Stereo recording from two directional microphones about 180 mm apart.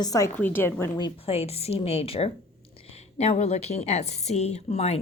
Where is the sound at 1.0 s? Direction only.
30° left (ahead or behind).